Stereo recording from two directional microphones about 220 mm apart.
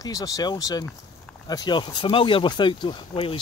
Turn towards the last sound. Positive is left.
turn(degrees=25)  # may be behind; listen again after turning